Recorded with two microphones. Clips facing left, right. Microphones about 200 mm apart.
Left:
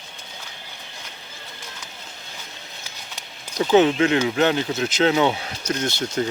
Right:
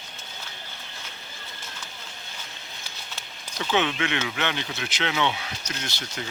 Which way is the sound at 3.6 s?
40° left (ahead or behind).